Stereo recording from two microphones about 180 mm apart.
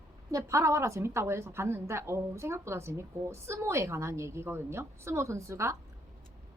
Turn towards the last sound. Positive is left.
turn(degrees=-15)  # may be behind; listen again after turning